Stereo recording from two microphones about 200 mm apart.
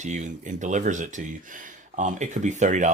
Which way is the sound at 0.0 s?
35° right (ahead or behind).